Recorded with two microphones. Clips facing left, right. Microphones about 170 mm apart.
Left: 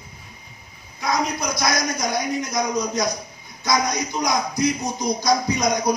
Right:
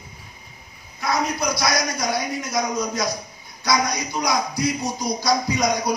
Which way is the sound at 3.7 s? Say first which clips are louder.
Even; 20° left (ahead or behind).